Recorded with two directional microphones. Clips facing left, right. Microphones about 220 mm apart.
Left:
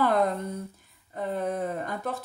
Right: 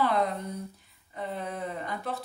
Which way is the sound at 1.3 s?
45° left (ahead or behind).